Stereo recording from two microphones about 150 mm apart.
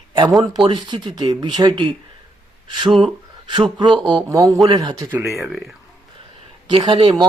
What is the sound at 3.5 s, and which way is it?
Speech, 30° right (ahead or behind).